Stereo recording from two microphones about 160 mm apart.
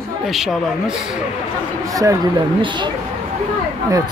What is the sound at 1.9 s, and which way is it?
Speech, 20° right (ahead or behind).